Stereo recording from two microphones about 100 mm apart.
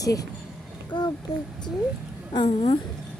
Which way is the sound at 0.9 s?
50° left (ahead or behind).